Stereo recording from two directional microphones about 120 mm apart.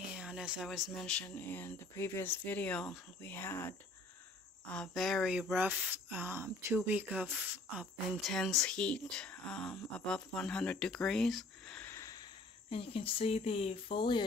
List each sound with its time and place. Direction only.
0.1 s speech: 5° right (ahead or behind)
3.3 s speech: 20° left (ahead or behind)
4.6 s speech: 5° left (ahead or behind); by 7.8 s 15° right (ahead or behind)
7.8 s speech: 5° left (ahead or behind)
11.9 s a sound: 30° left (ahead or behind)
12.6 s speech: 50° left (ahead or behind)